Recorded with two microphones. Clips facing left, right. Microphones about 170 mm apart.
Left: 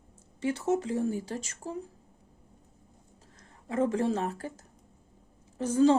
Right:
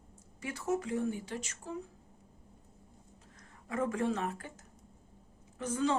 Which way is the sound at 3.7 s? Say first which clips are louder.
Left 5 dB; 30° left (ahead or behind).